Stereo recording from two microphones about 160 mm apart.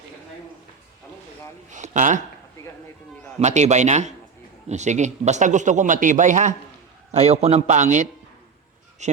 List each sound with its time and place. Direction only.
1.7 s a man's voice: 50° right (ahead or behind)
3.4 s a man's voice: 45° right (ahead or behind)